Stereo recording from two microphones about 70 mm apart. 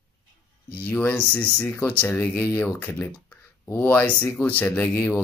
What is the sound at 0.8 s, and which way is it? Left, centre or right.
Speech, left.